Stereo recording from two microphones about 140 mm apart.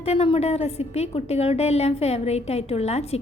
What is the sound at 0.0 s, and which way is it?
A woman's voice, 45° left (ahead or behind).